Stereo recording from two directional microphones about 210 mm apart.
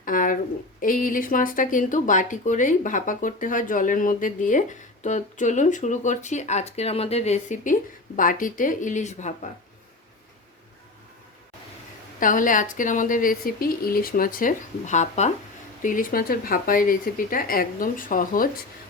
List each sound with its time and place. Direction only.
0.0 s a sound: 40° left (ahead or behind)
0.8 s speech: 40° left (ahead or behind)
12.2 s speech: 40° left (ahead or behind)